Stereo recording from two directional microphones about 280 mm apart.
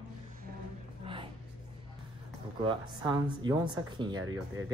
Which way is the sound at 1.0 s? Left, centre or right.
Centre.